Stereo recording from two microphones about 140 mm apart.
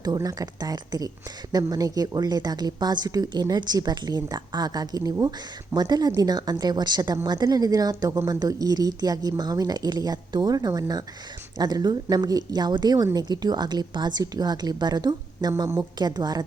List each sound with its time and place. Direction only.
0.0 s speech: 25° right (ahead or behind)